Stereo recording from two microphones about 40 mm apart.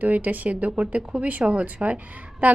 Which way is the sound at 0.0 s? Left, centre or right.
Right.